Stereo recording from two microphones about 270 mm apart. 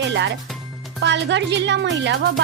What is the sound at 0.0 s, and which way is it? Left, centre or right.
Speech, right.